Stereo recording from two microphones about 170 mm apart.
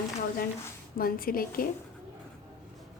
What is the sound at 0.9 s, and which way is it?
Speech, 60° left (ahead or behind).